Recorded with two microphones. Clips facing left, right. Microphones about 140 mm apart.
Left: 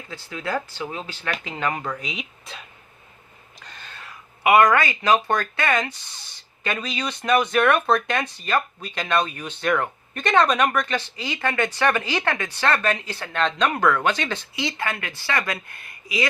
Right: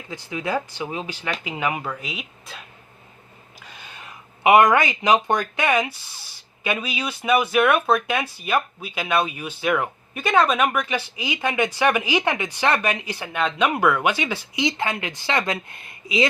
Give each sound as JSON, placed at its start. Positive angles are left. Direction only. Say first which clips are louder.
{"t": 0.1, "sound": "speech", "louder": "right 2 dB", "side_deg": -15}